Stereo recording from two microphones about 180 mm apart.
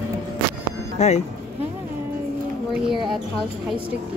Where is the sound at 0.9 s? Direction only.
40° left (ahead or behind).